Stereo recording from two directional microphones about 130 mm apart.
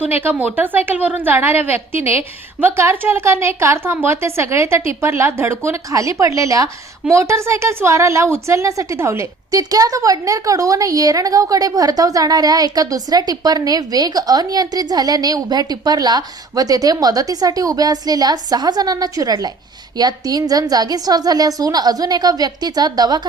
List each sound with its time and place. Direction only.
0.0 s a woman's voice: 15° right (ahead or behind); by 23.2 s 30° right (ahead or behind)